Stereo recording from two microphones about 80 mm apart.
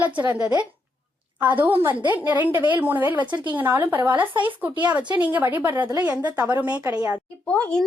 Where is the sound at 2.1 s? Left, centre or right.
Right.